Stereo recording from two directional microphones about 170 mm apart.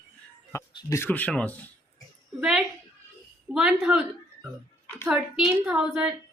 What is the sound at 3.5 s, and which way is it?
A woman's voice, 5° right (ahead or behind).